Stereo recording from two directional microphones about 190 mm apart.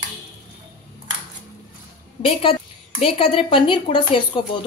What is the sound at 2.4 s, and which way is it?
A woman's voice, 30° left (ahead or behind).